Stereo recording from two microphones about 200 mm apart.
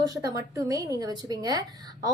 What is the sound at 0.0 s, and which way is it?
A woman's voice, 20° right (ahead or behind).